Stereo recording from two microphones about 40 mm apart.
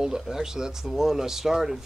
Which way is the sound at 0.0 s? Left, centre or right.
Centre.